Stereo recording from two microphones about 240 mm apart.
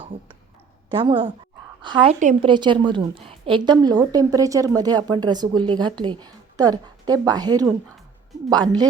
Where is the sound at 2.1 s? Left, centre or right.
Right.